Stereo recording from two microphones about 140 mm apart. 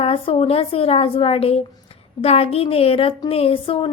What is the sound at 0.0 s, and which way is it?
A woman's voice, 45° left (ahead or behind).